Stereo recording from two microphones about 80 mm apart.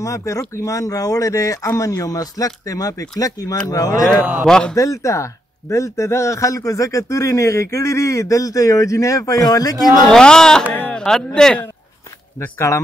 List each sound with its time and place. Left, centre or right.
0.0 s a man's voice: left
4.2 s a man's voice: right
4.5 s speech: centre
4.7 s a man's voice: left
10.0 s speech: centre
10.7 s a sound: left
11.0 s speech: centre
12.4 s a man's voice: left